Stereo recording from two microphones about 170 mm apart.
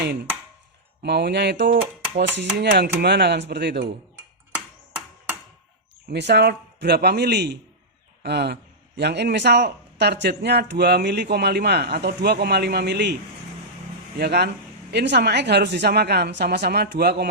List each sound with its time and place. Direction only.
1.0 s speech: 85° right
6.1 s speech: 85° right
14.2 s speech: 70° right (ahead or behind)